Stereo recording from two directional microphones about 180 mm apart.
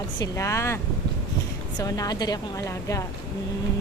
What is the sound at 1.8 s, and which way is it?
A woman's voice, 20° left (ahead or behind).